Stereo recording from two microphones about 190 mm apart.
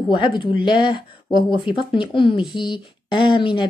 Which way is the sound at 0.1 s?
25° left (ahead or behind).